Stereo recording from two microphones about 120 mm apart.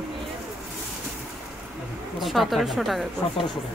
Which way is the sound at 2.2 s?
Centre (ahead or behind).